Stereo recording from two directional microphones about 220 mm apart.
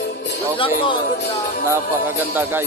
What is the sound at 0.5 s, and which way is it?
Speech, 25° left (ahead or behind).